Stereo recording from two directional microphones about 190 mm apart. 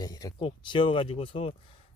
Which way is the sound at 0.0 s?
20° left (ahead or behind).